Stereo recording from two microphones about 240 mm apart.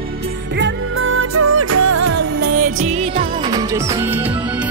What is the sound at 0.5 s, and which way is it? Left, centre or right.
Music, right.